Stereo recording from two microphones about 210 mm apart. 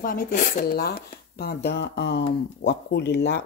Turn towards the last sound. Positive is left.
turn(degrees=55)  # may be behind; listen again after turning